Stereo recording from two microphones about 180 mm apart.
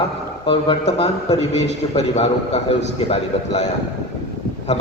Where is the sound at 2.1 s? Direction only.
35° left (ahead or behind).